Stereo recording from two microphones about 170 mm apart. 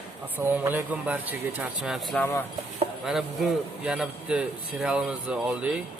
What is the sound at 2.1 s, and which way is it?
Speech, 15° left (ahead or behind).